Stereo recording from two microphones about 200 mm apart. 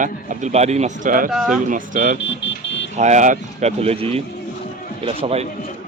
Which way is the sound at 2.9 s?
35° right (ahead or behind).